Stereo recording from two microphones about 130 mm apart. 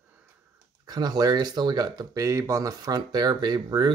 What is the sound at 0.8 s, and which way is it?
Speech, 30° right (ahead or behind).